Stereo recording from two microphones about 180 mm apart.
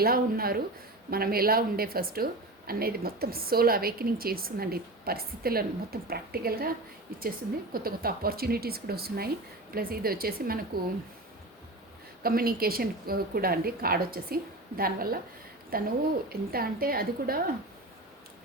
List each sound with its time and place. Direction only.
0.0 s a woman's voice: 55° right (ahead or behind)
12.2 s a woman's voice: 55° right (ahead or behind)